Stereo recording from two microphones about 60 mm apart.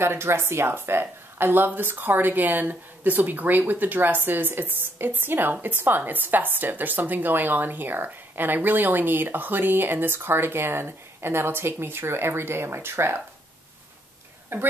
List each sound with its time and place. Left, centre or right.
0.0 s a woman's voice: right